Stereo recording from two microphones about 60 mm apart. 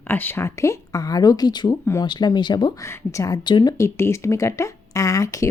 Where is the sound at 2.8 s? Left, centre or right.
Left.